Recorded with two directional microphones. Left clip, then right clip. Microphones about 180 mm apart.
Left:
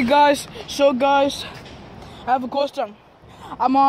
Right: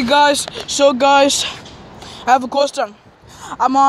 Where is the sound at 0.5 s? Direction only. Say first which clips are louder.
Right 4 dB; 5° right (ahead or behind).